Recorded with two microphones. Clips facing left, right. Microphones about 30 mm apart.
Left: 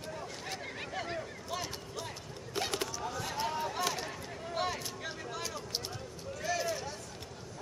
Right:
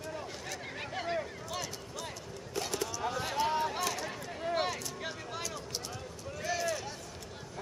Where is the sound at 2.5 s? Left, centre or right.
Left.